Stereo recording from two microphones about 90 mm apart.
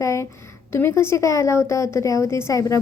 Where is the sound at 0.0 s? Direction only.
35° left (ahead or behind).